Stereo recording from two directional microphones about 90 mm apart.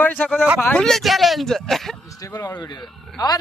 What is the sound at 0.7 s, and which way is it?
Speech, 5° left (ahead or behind).